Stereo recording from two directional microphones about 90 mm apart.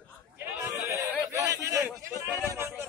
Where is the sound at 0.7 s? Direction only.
35° right (ahead or behind).